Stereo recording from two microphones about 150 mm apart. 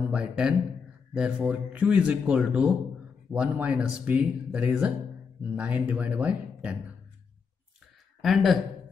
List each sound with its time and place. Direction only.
0.1 s speech: 5° right (ahead or behind)
8.2 s speech: centre (ahead or behind)